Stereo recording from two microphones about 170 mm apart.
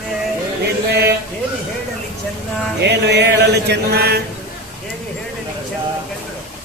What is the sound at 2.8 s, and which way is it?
Mantra, 80° right.